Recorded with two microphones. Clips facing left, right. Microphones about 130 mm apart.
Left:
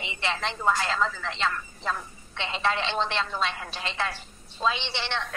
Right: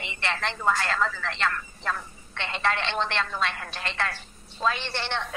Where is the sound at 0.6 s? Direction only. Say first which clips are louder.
Even; 10° left (ahead or behind).